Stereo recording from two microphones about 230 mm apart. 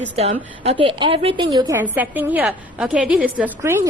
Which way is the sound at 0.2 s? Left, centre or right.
Right.